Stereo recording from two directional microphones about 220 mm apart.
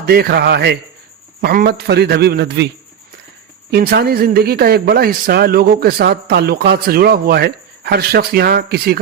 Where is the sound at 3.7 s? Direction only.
45° right (ahead or behind).